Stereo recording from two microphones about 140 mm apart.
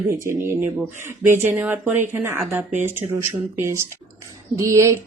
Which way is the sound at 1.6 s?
10° right (ahead or behind).